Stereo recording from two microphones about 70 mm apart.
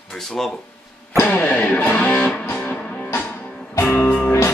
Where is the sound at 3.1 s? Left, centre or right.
Left.